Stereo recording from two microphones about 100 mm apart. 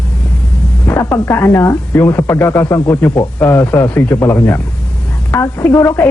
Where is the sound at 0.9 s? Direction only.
20° left (ahead or behind).